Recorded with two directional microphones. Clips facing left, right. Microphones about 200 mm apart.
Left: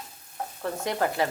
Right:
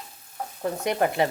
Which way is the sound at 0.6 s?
20° right (ahead or behind).